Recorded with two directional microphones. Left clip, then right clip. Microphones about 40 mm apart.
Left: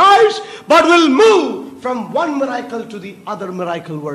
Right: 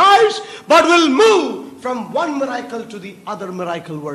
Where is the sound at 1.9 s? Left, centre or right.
Left.